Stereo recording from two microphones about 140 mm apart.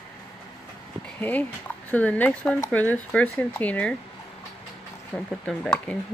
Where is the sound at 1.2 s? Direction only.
10° left (ahead or behind).